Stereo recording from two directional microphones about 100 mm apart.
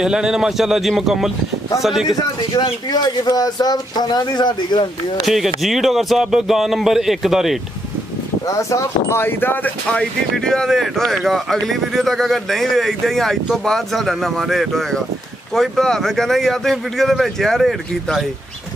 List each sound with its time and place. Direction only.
0.0 s speech: 5° right (ahead or behind)
2.0 s speech: 45° left (ahead or behind)
5.2 s speech: centre (ahead or behind)
8.5 s speech: 30° left (ahead or behind); by 18.2 s centre (ahead or behind)